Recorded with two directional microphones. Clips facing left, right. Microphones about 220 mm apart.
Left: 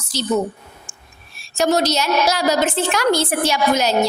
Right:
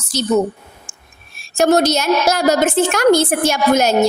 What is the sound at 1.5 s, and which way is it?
A woman's voice, 50° right (ahead or behind).